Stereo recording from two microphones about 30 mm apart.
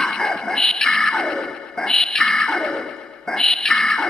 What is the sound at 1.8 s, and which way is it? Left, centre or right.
Music, centre.